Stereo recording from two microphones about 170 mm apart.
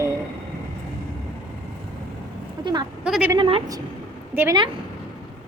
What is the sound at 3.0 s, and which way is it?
Speech, 5° right (ahead or behind).